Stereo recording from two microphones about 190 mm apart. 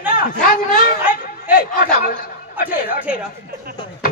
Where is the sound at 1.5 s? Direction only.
45° left (ahead or behind).